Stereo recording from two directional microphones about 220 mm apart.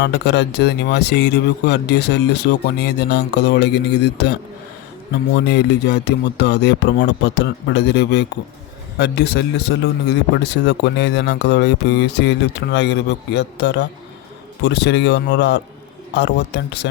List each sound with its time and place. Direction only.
0.0 s a man's voice: 50° left (ahead or behind)
5.5 s a man's voice: 50° left (ahead or behind)